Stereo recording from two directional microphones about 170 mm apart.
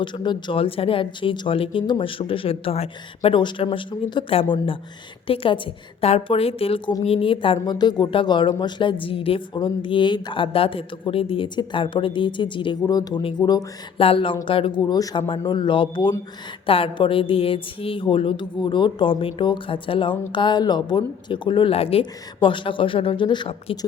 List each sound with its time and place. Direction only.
0.0 s speech: 25° left (ahead or behind)